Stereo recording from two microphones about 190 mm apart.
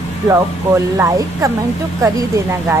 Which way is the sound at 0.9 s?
15° right (ahead or behind).